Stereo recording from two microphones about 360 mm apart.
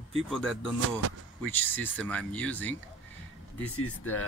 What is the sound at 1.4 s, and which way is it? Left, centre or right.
Speech, centre.